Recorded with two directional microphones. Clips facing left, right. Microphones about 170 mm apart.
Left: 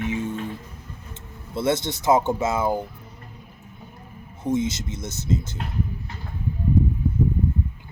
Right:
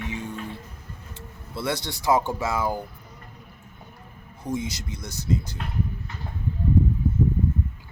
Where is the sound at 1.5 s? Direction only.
20° left (ahead or behind).